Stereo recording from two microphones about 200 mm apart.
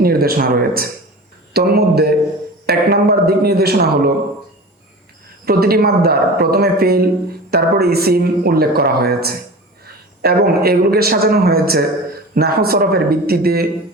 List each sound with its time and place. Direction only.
0.0 s a woman's voice: 50° right (ahead or behind)
5.5 s a woman's voice: 50° right (ahead or behind)